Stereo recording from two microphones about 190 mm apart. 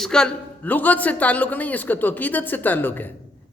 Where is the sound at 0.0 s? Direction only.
5° left (ahead or behind).